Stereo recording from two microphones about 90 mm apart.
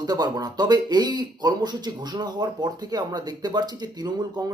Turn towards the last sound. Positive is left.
turn(degrees=-50)  # may be behind; listen again after turning